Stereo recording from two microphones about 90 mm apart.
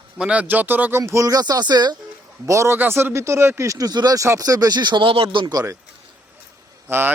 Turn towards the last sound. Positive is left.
turn(degrees=-25)  # may be behind; listen again after turning